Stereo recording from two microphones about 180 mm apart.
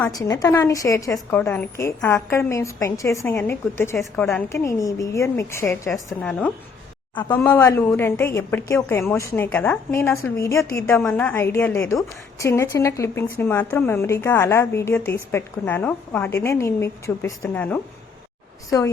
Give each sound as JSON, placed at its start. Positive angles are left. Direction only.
{"t": 0.1, "sound": "speech", "side_deg": 20}
{"t": 7.3, "sound": "speech", "side_deg": 10}